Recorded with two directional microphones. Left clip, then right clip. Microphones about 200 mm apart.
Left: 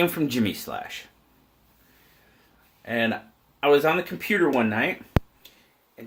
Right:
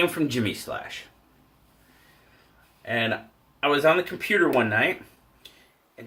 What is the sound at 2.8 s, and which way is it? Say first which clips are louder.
Speech: even; 45° left (ahead or behind).